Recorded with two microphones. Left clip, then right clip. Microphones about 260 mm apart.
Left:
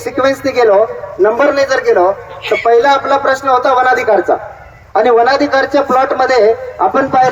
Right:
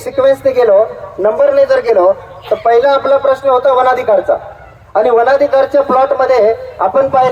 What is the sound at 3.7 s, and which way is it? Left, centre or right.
A woman's voice, right.